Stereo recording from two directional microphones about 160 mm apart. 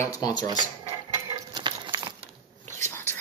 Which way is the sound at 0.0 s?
20° left (ahead or behind).